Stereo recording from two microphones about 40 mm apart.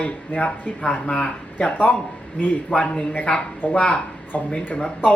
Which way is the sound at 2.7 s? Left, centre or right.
Left.